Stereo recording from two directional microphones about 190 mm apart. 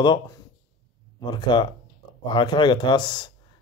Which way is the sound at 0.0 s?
25° left (ahead or behind).